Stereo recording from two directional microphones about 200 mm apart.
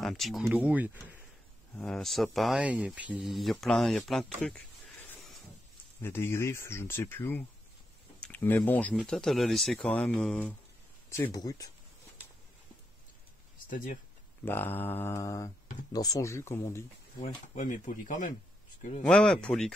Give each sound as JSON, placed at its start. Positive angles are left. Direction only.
{"t": 0.0, "sound": "speech", "side_deg": 0}
{"t": 1.8, "sound": "speech", "side_deg": 5}
{"t": 4.4, "sound": "a sound", "side_deg": 5}
{"t": 6.0, "sound": "speech", "side_deg": 15}
{"t": 13.7, "sound": "speech", "side_deg": 40}
{"t": 14.4, "sound": "speech", "side_deg": 10}
{"t": 17.2, "sound": "speech", "side_deg": 40}
{"t": 19.0, "sound": "speech", "side_deg": 5}